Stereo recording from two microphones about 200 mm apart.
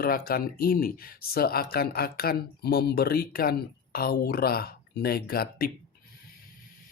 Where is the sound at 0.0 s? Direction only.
50° left (ahead or behind).